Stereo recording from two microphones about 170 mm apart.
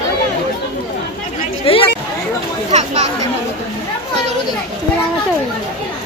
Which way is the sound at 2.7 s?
40° right (ahead or behind).